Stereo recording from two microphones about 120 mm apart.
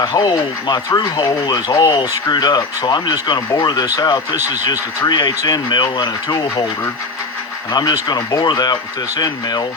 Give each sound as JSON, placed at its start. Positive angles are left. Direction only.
{"t": 0.0, "sound": "speech", "side_deg": 35}
{"t": 7.7, "sound": "speech", "side_deg": 35}